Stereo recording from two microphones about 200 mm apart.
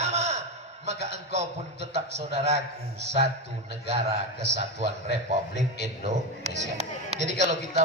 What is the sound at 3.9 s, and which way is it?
A man's voice, 30° right (ahead or behind).